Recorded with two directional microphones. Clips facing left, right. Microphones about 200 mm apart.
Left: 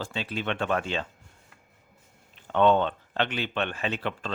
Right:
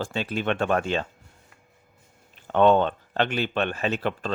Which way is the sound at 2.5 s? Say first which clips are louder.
Right 3 dB; 45° right (ahead or behind).